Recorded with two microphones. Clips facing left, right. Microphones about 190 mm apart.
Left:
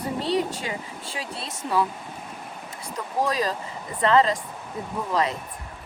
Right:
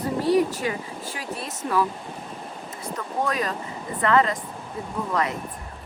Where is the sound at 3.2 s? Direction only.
30° left (ahead or behind).